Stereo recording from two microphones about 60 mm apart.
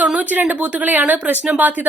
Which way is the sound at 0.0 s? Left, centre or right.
Right.